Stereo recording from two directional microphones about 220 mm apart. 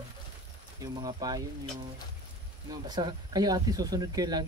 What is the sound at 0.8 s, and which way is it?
Speech, 15° right (ahead or behind).